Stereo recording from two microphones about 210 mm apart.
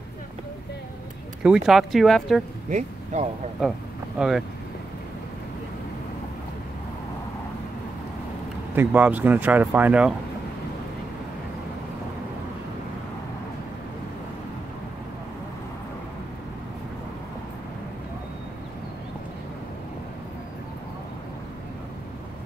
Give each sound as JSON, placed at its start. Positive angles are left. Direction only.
{"t": 1.4, "sound": "speech", "side_deg": -5}
{"t": 2.7, "sound": "speech", "side_deg": -35}
{"t": 4.2, "sound": "speech", "side_deg": 0}
{"t": 8.7, "sound": "speech", "side_deg": -10}